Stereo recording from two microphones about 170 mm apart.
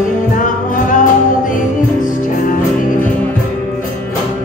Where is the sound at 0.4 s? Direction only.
50° left (ahead or behind).